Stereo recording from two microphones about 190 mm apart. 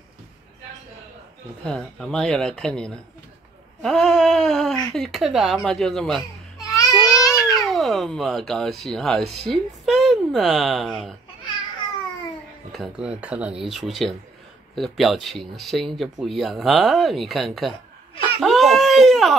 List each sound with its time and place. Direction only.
1.6 s speech: 5° left (ahead or behind)
6.6 s babbling: 20° left (ahead or behind)
7.6 s speech: centre (ahead or behind)
12.7 s speech: 5° right (ahead or behind)
18.4 s baby cry: centre (ahead or behind)